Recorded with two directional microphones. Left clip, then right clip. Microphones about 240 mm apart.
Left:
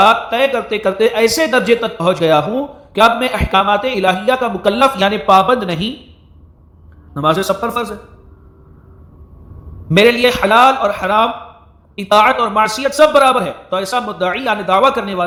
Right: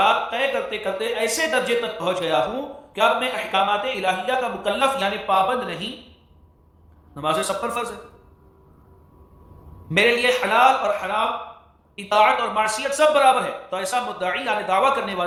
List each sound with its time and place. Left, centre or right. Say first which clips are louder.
0.0 s a man's voice: left 8 dB; centre
7.1 s a man's voice: left 8 dB; centre
9.9 s a man's voice: left 7 dB; centre